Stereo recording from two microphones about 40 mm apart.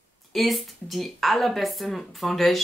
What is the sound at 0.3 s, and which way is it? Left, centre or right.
Speech, centre.